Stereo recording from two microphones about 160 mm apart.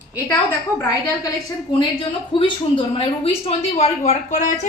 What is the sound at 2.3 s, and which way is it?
A woman's voice, 30° left (ahead or behind).